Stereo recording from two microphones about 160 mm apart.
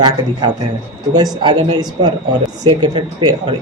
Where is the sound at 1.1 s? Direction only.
25° right (ahead or behind).